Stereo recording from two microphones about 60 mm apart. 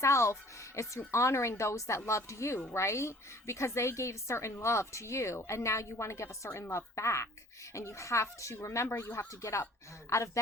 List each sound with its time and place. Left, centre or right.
0.0 s a woman's voice: left